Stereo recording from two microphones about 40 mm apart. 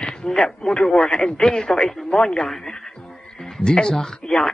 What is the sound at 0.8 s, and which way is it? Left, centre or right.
Speech, centre.